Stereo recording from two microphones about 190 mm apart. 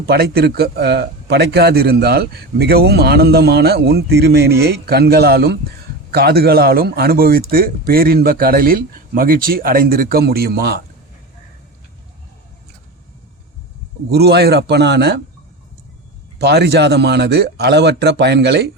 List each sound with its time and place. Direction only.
0.0 s speech: 55° right (ahead or behind)
14.1 s speech: 55° right (ahead or behind)
16.4 s speech: 60° right (ahead or behind)